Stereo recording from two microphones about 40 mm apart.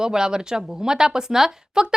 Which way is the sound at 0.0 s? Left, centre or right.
Centre.